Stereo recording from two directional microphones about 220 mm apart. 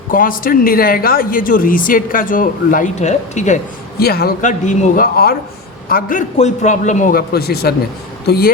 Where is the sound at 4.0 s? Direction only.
45° left (ahead or behind).